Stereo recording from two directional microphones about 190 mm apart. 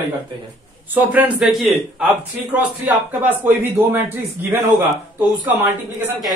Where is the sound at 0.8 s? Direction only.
10° right (ahead or behind).